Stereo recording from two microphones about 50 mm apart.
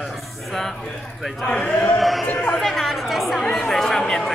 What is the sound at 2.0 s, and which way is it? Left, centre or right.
Speech, centre.